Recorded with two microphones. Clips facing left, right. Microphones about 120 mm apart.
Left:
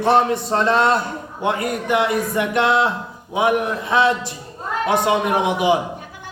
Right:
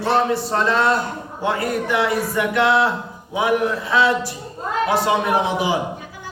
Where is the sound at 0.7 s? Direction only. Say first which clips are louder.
Left 2 dB; 20° left (ahead or behind).